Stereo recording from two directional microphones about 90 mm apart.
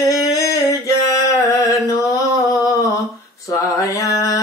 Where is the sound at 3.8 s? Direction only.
35° left (ahead or behind).